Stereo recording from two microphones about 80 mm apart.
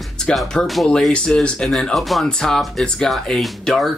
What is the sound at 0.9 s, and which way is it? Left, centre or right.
Speech, centre.